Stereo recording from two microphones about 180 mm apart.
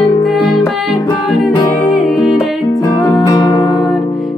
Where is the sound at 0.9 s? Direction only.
20° left (ahead or behind).